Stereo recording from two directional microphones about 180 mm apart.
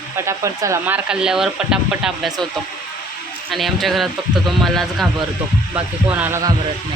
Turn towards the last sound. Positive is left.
turn(degrees=-15)  # may be behind; listen again after turning